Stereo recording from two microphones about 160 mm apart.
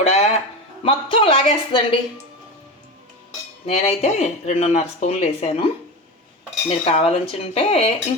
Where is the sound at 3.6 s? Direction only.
40° left (ahead or behind).